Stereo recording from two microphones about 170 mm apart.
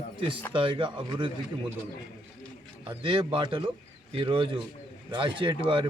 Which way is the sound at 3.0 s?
30° right (ahead or behind).